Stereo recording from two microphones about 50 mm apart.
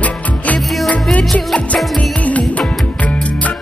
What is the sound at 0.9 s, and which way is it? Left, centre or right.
Music, left.